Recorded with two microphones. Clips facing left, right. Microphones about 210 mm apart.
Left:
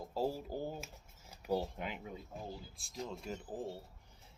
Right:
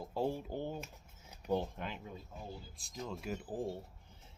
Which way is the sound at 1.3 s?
5° left (ahead or behind).